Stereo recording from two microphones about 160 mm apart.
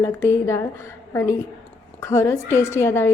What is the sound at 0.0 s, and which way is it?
A woman's voice, 15° left (ahead or behind).